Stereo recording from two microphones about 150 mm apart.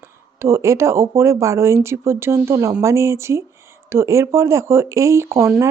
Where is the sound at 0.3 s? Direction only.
15° right (ahead or behind).